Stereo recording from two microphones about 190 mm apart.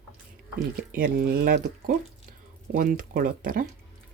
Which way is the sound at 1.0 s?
50° right (ahead or behind).